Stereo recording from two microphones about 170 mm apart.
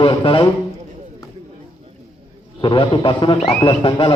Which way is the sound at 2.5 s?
30° left (ahead or behind).